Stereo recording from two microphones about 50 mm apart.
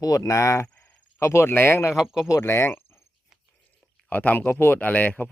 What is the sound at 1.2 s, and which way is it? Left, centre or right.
Speech, left.